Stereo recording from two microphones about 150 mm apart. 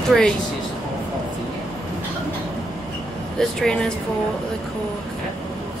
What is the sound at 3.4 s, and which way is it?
Speech, 5° left (ahead or behind).